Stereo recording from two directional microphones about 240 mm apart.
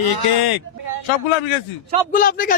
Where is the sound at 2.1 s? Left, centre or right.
Left.